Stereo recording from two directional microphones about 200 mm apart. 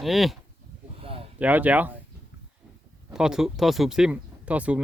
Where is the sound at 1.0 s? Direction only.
30° right (ahead or behind).